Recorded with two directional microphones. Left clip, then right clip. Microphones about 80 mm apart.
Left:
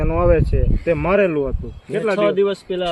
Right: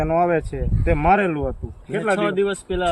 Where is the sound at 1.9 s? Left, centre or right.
Right.